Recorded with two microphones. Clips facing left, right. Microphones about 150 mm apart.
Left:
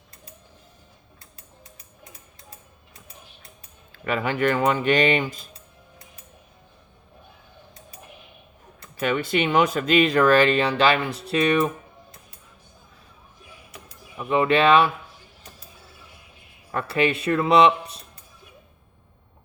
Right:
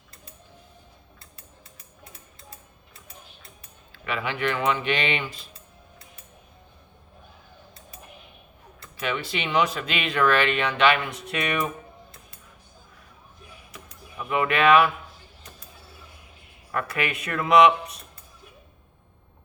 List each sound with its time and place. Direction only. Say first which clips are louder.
3.9 s speech: left 5 dB; 45° left (ahead or behind)
9.0 s speech: left 6 dB; 45° left (ahead or behind)
14.2 s speech: left 4 dB; 30° left (ahead or behind)
16.7 s speech: left 5 dB; 30° left (ahead or behind)